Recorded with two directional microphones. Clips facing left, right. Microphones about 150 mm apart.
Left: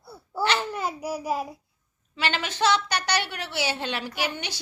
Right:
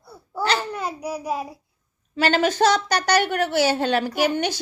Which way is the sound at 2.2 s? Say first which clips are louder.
Right 8 dB; 45° right (ahead or behind).